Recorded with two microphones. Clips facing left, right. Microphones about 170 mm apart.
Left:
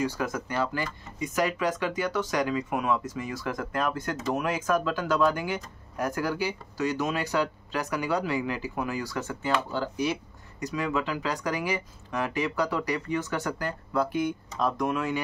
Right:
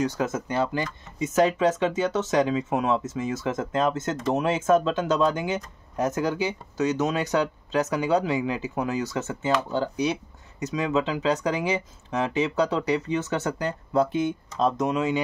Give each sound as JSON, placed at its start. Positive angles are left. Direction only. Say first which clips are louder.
{"t": 0.2, "sound": "speech", "louder": "right 4 dB", "side_deg": -25}